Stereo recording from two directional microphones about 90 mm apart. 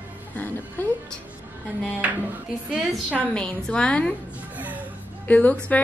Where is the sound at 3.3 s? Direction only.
10° left (ahead or behind).